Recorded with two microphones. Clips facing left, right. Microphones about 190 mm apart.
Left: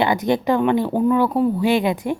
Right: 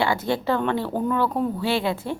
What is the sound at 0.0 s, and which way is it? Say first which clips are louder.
Speech: left 5 dB; 20° left (ahead or behind).